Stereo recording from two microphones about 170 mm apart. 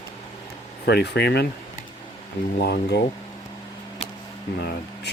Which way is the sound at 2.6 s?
80° left.